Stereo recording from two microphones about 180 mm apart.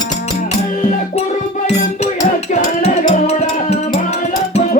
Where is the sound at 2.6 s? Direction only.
45° left (ahead or behind).